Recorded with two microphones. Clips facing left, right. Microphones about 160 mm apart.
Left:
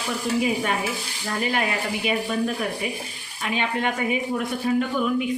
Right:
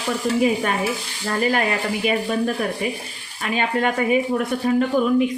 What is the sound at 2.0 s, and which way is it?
Speech, 45° right (ahead or behind).